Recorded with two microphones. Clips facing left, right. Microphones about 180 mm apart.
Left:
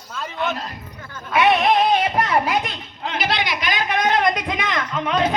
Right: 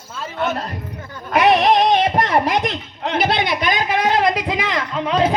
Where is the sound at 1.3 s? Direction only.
40° right (ahead or behind).